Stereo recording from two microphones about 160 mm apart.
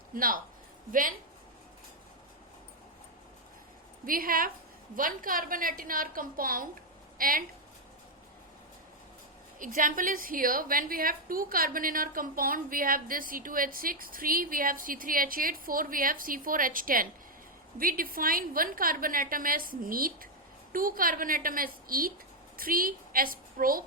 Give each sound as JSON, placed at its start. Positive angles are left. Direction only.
{"t": 0.1, "sound": "a woman's voice", "side_deg": -65}
{"t": 4.0, "sound": "a woman's voice", "side_deg": -60}
{"t": 9.6, "sound": "a woman's voice", "side_deg": -55}